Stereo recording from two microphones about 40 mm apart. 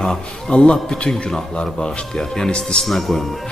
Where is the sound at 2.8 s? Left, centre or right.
Centre.